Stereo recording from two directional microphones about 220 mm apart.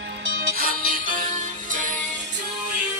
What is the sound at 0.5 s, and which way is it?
Music, 40° right (ahead or behind).